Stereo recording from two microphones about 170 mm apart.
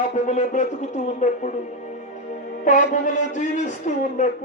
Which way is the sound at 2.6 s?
50° left (ahead or behind).